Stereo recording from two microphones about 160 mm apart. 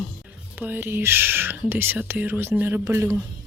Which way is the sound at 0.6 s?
10° right (ahead or behind).